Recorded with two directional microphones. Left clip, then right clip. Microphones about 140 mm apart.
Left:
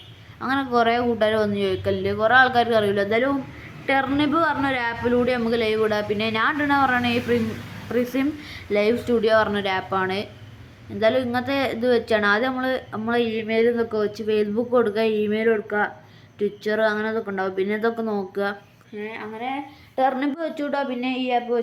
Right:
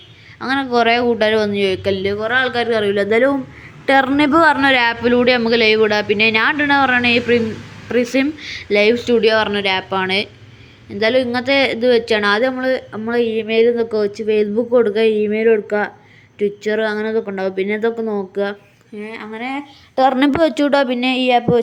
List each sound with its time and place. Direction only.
0.3 s speech: 20° right (ahead or behind); by 2.6 s centre (ahead or behind)
2.6 s speech: 15° right (ahead or behind)
3.0 s speech: 35° right (ahead or behind)
3.8 s speech: 45° right (ahead or behind); by 15.5 s 15° right (ahead or behind)
15.5 s speech: 25° right (ahead or behind)
18.9 s speech: 50° right (ahead or behind); by 21.6 s 65° right (ahead or behind)